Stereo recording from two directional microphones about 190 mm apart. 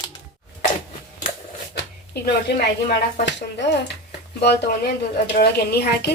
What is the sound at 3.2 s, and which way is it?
A woman's voice, 70° left (ahead or behind).